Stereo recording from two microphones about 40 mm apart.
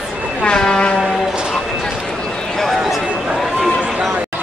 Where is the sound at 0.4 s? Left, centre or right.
Left.